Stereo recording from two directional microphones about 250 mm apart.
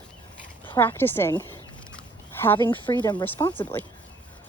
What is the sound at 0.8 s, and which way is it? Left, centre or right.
Speech, centre.